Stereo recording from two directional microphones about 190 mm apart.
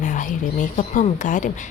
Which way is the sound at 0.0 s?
40° left (ahead or behind).